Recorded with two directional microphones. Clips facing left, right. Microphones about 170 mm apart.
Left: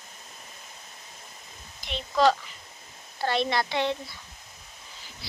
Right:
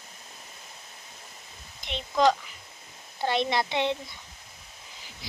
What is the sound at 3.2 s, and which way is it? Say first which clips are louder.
Speech: even; 20° right (ahead or behind).